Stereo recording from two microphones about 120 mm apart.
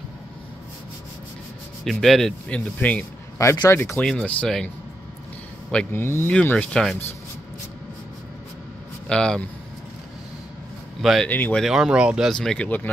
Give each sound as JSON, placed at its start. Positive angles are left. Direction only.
{"t": 1.9, "sound": "speech", "side_deg": 0}
{"t": 4.0, "sound": "speech", "side_deg": 5}
{"t": 5.7, "sound": "speech", "side_deg": 10}
{"t": 9.1, "sound": "speech", "side_deg": 5}
{"t": 11.0, "sound": "speech", "side_deg": 0}
{"t": 11.2, "sound": "speech", "side_deg": 15}
{"t": 11.6, "sound": "speech", "side_deg": -5}
{"t": 12.3, "sound": "speech", "side_deg": 5}